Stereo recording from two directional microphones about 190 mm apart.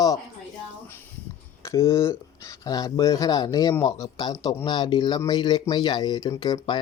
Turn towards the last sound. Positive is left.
turn(degrees=20)  # may be behind; listen again after turning